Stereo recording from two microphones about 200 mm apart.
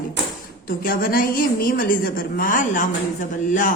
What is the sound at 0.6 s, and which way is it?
A woman's voice, 45° left (ahead or behind).